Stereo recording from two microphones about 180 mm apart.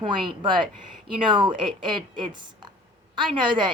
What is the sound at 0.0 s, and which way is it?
Speech, 25° right (ahead or behind).